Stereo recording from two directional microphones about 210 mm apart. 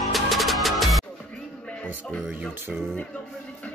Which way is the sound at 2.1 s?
Centre (ahead or behind).